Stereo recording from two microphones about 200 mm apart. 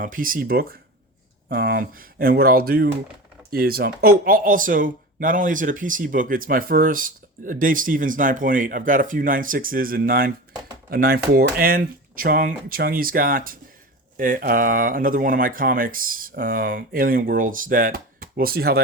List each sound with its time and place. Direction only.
0.0 s speech: 45° right (ahead or behind)